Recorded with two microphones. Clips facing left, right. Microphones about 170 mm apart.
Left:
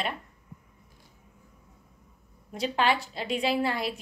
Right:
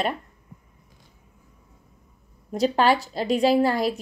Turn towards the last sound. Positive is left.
turn(degrees=-40)  # may be behind; listen again after turning